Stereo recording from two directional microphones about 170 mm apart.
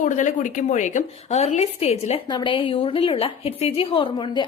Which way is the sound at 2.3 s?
25° left (ahead or behind).